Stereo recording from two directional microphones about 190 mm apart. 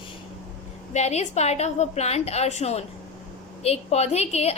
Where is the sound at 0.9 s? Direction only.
35° left (ahead or behind).